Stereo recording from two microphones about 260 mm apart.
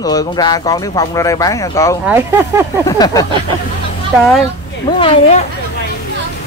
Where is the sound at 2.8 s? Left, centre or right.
Centre.